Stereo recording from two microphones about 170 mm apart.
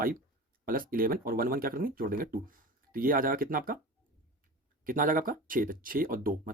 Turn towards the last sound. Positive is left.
turn(degrees=-55)  # may be behind; listen again after turning